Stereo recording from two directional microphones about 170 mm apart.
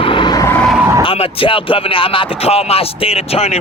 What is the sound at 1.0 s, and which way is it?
Speech, 35° left (ahead or behind).